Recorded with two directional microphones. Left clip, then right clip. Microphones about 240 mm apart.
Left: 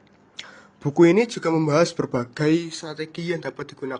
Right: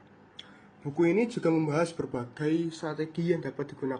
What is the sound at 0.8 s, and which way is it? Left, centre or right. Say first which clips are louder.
A man's voice: left 9 dB; left.